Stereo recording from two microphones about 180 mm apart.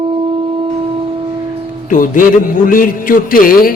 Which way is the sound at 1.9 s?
45° left (ahead or behind).